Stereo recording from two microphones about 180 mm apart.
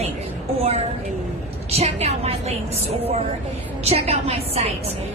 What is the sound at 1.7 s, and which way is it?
Speech, 35° right (ahead or behind).